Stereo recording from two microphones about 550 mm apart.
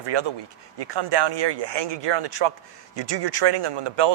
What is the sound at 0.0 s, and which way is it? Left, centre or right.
Speech, right.